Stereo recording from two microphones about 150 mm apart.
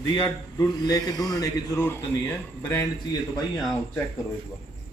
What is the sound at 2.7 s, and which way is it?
Speech, 25° left (ahead or behind).